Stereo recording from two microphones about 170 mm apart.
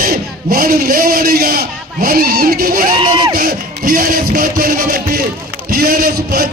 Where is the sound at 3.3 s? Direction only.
55° right (ahead or behind).